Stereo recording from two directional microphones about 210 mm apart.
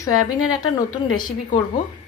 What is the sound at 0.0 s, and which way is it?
A woman's voice, 20° left (ahead or behind).